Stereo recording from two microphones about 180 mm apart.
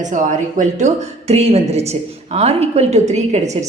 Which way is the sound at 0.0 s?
45° right (ahead or behind).